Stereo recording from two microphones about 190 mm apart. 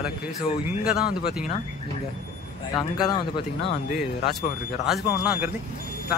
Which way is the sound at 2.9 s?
20° left (ahead or behind).